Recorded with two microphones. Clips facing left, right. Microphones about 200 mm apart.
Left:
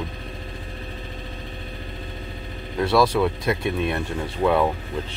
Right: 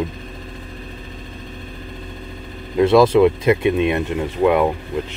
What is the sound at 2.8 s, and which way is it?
Speech, 20° right (ahead or behind).